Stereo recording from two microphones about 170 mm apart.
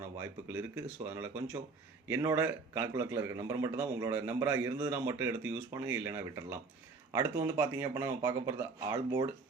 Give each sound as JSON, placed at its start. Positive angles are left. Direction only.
{"t": 0.2, "sound": "a man's voice", "side_deg": -10}